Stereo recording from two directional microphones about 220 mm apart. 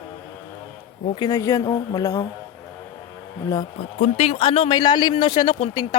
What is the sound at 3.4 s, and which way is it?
Speech, 15° left (ahead or behind).